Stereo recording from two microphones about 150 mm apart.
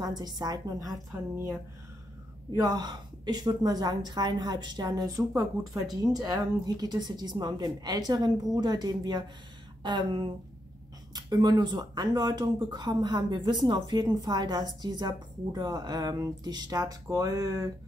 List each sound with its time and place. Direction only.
0.2 s speech: 25° right (ahead or behind)
2.5 s speech: 25° right (ahead or behind)